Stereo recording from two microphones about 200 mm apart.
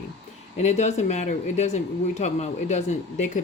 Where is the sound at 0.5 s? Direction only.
35° left (ahead or behind).